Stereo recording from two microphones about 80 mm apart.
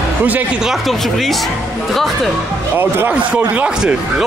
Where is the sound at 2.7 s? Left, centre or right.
Right.